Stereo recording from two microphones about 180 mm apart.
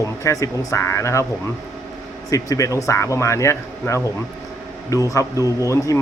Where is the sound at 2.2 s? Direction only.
20° left (ahead or behind).